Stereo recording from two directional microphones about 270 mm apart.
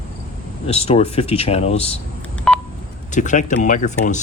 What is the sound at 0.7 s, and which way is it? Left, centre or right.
Speech, left.